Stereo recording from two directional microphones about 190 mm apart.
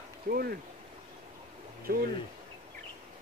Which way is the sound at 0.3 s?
55° right (ahead or behind).